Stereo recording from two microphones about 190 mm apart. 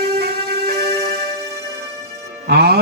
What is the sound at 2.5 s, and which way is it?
Speech, 55° right (ahead or behind).